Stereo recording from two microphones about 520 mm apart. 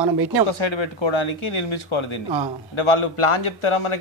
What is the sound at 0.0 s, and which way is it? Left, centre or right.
Speech, right.